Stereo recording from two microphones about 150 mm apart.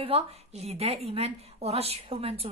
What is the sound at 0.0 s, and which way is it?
A woman's voice, 40° right (ahead or behind).